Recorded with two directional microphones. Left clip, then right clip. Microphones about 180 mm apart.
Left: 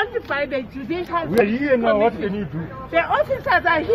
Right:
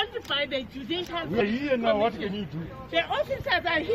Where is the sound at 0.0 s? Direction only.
Centre (ahead or behind).